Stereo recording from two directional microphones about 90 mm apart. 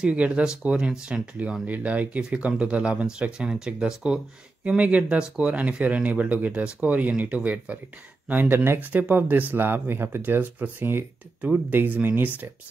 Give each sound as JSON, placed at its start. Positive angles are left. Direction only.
{"t": 0.0, "sound": "speech", "side_deg": -15}